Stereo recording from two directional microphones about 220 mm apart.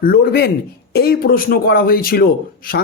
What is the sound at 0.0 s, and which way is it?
A man's voice, 45° left (ahead or behind).